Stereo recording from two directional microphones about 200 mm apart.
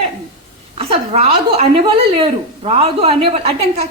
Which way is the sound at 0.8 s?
30° right (ahead or behind).